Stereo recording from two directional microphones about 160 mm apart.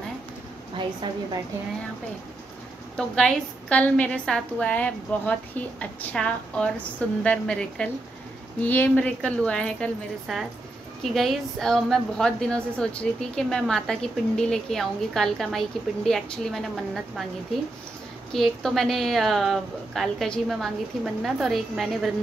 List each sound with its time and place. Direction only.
0.7 s a woman's voice: 30° right (ahead or behind)
3.2 s a woman's voice: 5° left (ahead or behind)
18.3 s a woman's voice: centre (ahead or behind)